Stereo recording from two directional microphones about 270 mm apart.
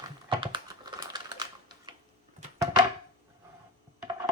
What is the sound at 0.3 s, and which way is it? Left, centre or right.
Typing, centre.